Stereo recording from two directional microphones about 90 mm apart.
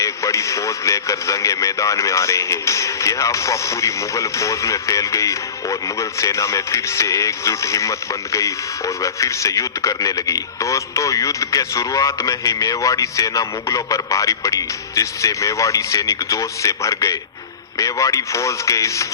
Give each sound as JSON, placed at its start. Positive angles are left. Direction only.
{"t": 0.0, "sound": "speech", "side_deg": 35}